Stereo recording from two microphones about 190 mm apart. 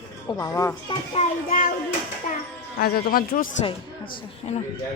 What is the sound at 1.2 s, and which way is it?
Speech, 40° left (ahead or behind).